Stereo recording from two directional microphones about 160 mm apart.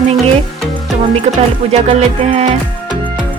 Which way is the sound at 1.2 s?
45° right (ahead or behind).